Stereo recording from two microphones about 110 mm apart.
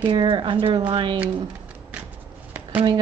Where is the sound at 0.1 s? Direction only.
50° right (ahead or behind).